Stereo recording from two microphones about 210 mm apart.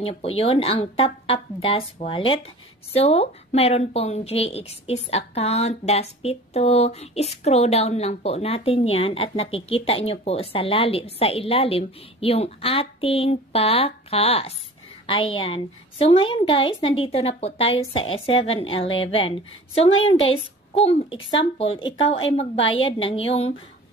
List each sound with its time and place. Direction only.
0.0 s speech: 30° left (ahead or behind)